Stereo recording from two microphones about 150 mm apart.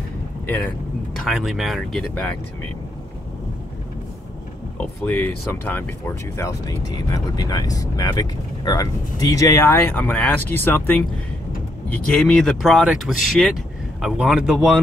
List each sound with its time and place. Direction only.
1.1 s speech: centre (ahead or behind)
5.0 s speech: 15° left (ahead or behind); by 14.8 s centre (ahead or behind)